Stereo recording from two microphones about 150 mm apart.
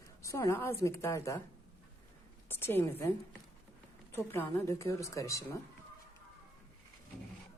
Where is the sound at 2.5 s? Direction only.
15° left (ahead or behind).